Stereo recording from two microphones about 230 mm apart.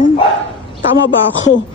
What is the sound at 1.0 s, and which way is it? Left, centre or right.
Speech, left.